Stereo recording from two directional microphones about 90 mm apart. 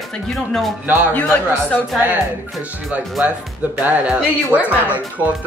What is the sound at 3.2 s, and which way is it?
Speech, 20° right (ahead or behind).